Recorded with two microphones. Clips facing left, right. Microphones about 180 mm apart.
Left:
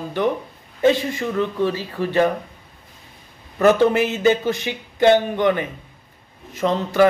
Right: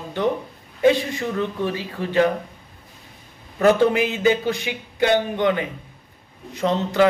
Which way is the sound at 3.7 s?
15° right (ahead or behind).